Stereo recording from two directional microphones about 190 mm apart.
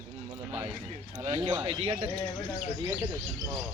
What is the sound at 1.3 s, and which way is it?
Speech, 25° right (ahead or behind).